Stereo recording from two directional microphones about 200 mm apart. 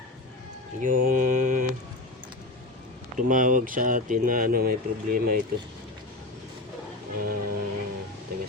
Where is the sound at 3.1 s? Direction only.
40° right (ahead or behind).